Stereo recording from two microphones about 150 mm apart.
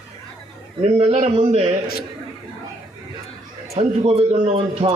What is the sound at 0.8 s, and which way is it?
Speech, 45° right (ahead or behind).